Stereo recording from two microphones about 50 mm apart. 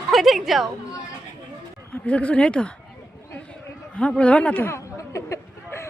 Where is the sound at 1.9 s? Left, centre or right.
Left.